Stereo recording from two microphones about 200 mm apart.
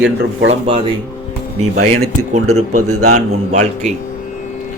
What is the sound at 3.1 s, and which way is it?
Speech, 35° right (ahead or behind).